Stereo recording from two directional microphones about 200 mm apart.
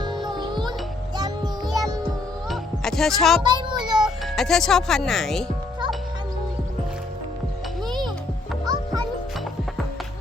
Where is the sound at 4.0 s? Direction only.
Centre (ahead or behind).